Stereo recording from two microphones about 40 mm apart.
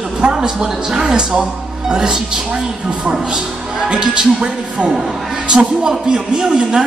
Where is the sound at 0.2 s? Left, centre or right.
Centre.